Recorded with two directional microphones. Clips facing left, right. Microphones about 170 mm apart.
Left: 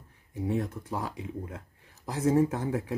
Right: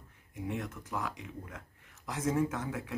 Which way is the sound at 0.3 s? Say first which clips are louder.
Left 7 dB; 35° left (ahead or behind).